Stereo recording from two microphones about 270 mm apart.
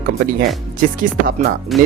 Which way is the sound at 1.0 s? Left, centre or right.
Right.